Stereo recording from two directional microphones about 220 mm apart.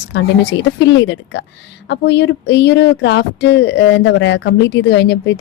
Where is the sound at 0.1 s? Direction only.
55° left (ahead or behind).